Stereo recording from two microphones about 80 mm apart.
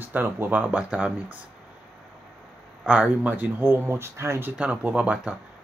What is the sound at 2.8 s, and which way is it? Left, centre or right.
Speech, centre.